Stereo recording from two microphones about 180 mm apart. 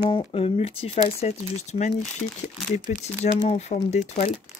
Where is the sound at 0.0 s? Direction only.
25° left (ahead or behind).